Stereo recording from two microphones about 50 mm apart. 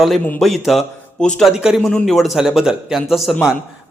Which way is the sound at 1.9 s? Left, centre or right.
Centre.